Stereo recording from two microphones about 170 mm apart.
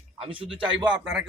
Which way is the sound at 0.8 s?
5° right (ahead or behind).